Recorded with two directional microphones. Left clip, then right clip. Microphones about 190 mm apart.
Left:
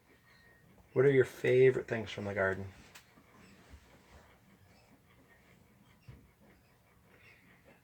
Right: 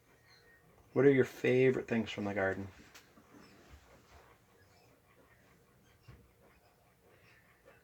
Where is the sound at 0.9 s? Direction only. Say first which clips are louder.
Even; 30° right (ahead or behind).